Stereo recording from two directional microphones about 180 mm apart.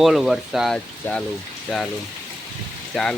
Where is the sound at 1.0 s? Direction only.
10° left (ahead or behind).